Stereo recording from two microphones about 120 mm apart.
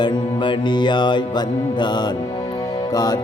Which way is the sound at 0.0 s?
40° left (ahead or behind).